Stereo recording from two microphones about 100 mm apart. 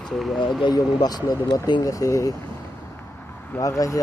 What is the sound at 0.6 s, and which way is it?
Speech, 45° left (ahead or behind).